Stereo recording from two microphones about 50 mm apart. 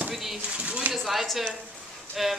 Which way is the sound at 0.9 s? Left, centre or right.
Centre.